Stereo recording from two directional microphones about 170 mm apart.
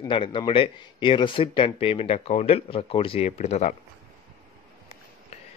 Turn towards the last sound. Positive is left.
turn(degrees=35)  # may be behind; listen again after turning